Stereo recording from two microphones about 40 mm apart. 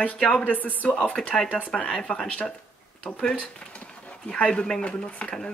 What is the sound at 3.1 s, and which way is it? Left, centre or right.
Speech, left.